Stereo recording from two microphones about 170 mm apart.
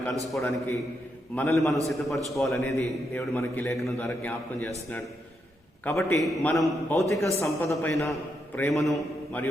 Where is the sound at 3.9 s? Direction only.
15° left (ahead or behind).